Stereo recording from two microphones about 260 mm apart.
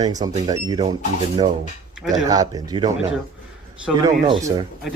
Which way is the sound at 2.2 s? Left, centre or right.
Centre.